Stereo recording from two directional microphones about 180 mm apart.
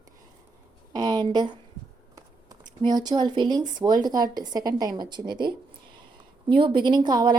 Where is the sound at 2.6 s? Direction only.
25° right (ahead or behind).